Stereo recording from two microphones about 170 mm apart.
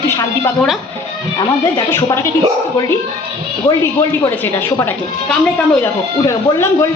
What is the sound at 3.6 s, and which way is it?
A woman's voice, 15° left (ahead or behind).